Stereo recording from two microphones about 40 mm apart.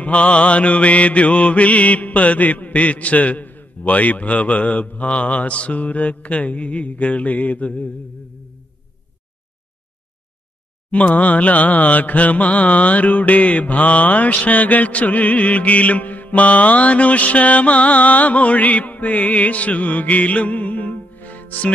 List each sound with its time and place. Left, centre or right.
0.0 s mantra: left
10.9 s mantra: left